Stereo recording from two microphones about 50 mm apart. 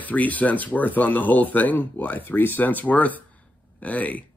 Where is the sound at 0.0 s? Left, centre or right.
Left.